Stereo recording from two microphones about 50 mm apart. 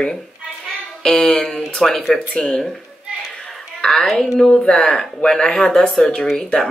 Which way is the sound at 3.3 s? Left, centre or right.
Centre.